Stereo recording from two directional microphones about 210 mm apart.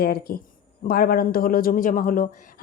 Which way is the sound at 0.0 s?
50° left (ahead or behind).